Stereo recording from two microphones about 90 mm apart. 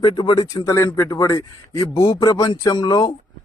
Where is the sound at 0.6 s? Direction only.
35° left (ahead or behind); by 3.1 s 50° left (ahead or behind).